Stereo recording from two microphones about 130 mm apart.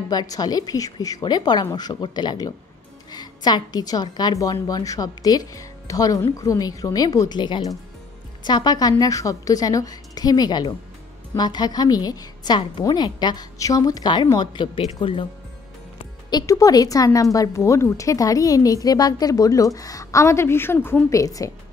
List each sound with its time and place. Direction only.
0.1 s a woman's voice: 30° left (ahead or behind)
16.3 s a woman's voice: 30° left (ahead or behind)